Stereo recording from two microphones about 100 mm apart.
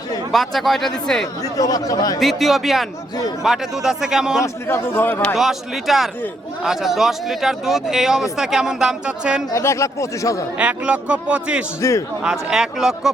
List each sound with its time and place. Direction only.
0.3 s speech: centre (ahead or behind)
1.5 s speech: 35° left (ahead or behind)
2.1 s speech: centre (ahead or behind)
4.4 s speech: 25° left (ahead or behind)
5.2 s speech: centre (ahead or behind)
9.5 s speech: 30° left (ahead or behind)
10.6 s a man's voice: 15° right (ahead or behind)
11.8 s speech: 30° left (ahead or behind)
12.2 s speech: 5° right (ahead or behind)